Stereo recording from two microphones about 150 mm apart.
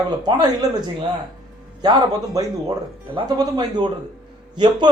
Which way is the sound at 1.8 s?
25° right (ahead or behind).